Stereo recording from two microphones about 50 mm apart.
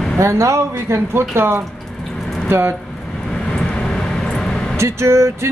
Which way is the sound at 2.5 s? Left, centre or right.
Right.